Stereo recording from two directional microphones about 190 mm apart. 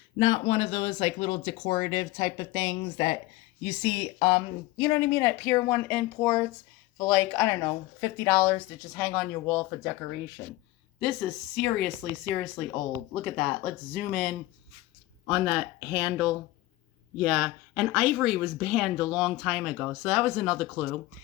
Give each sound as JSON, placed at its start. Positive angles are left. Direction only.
{"t": 0.2, "sound": "speech", "side_deg": 25}
{"t": 15.3, "sound": "speech", "side_deg": -5}